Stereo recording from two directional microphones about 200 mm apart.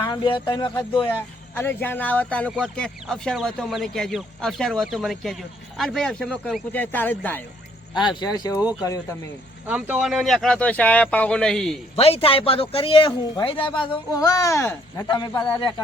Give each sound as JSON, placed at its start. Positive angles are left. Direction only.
{"t": 0.0, "sound": "speech", "side_deg": 20}
{"t": 1.5, "sound": "speech", "side_deg": 10}
{"t": 7.9, "sound": "speech", "side_deg": 20}
{"t": 9.6, "sound": "speech", "side_deg": -5}
{"t": 11.9, "sound": "speech", "side_deg": 30}